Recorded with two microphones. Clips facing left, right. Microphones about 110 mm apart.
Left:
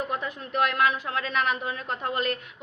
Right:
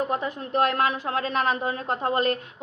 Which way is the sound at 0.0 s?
30° right (ahead or behind).